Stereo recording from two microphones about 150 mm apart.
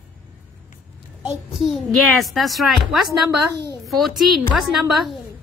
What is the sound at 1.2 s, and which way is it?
A child's voice, centre (ahead or behind).